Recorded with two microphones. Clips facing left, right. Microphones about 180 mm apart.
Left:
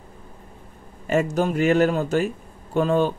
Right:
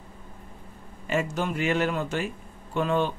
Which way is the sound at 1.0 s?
40° left (ahead or behind).